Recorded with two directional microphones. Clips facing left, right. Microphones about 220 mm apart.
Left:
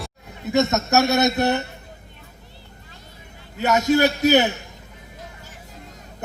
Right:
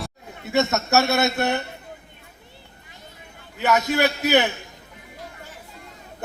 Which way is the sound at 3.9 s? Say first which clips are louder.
Left 5 dB; 45° left (ahead or behind).